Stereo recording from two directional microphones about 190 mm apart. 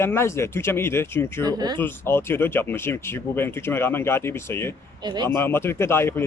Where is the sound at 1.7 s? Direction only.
10° left (ahead or behind).